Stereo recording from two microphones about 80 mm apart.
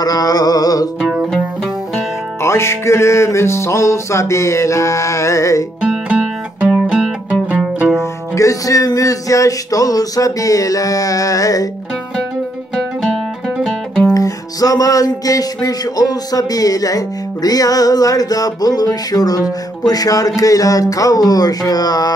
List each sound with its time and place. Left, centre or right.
0.0 s music: left
2.4 s music: left
5.8 s music: centre
7.2 s music: centre
8.0 s music: left
12.7 s music: centre
14.1 s music: left